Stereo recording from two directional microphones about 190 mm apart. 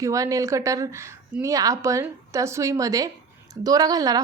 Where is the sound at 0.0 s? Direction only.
15° right (ahead or behind).